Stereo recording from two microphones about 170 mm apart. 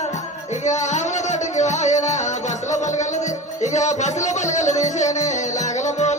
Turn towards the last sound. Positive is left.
turn(degrees=45)  # may be behind; listen again after turning